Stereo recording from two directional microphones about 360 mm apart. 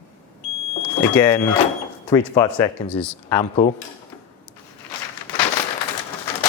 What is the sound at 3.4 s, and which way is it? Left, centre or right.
Speech, centre.